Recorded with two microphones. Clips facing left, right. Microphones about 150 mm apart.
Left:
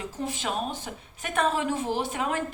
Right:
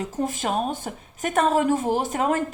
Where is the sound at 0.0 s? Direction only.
45° right (ahead or behind).